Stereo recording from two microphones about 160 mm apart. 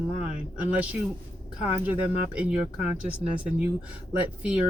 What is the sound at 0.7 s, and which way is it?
Speech, 10° right (ahead or behind).